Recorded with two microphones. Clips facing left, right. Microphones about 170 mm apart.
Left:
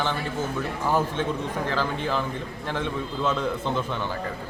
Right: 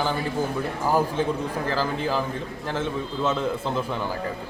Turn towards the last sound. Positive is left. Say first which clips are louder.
# right 1 dB
turn(degrees=-5)  # may be behind; listen again after turning